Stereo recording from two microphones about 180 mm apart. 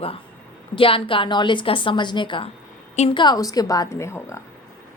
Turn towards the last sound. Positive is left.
turn(degrees=15)  # may be behind; listen again after turning